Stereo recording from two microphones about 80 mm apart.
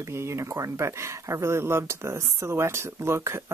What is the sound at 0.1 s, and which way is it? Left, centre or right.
Speech, right.